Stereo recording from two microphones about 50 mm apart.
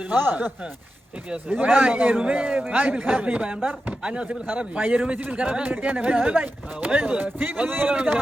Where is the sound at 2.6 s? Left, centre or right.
Right.